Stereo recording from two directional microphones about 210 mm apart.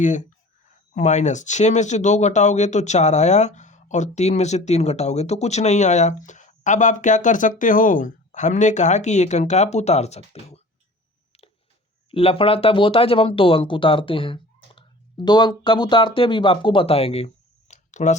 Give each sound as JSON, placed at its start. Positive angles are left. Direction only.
{"t": 0.0, "sound": "speech", "side_deg": 35}
{"t": 12.1, "sound": "speech", "side_deg": 25}